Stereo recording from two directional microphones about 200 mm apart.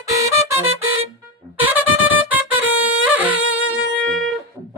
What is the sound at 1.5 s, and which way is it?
Music, 10° right (ahead or behind).